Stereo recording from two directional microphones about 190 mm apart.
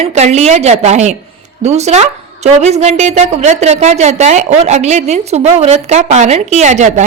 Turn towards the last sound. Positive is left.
turn(degrees=-40)  # may be behind; listen again after turning